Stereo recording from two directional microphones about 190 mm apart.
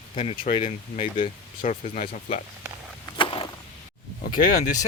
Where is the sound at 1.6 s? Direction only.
45° left (ahead or behind).